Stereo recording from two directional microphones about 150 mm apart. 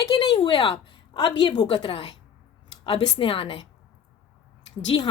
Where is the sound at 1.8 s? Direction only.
40° left (ahead or behind).